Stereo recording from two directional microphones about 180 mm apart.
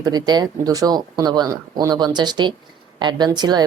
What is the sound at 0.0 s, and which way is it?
A woman's voice, 20° right (ahead or behind).